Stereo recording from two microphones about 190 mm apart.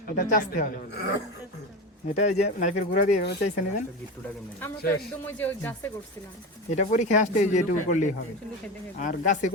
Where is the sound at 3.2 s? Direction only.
60° left (ahead or behind).